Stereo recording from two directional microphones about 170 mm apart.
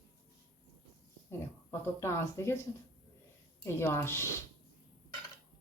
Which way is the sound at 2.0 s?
15° left (ahead or behind).